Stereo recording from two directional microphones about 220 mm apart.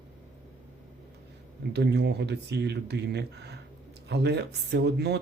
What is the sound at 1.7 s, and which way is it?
Speech, 50° right (ahead or behind).